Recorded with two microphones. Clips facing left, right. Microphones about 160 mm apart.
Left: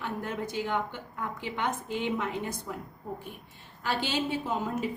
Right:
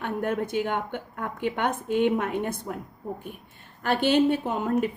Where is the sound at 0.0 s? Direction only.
55° right (ahead or behind).